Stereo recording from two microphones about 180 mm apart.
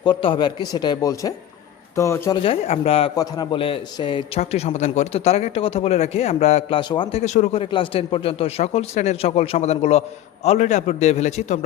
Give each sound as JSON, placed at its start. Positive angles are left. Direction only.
{"t": 0.0, "sound": "a man's voice", "side_deg": 25}
{"t": 2.4, "sound": "a man's voice", "side_deg": 30}
{"t": 4.4, "sound": "speech", "side_deg": 35}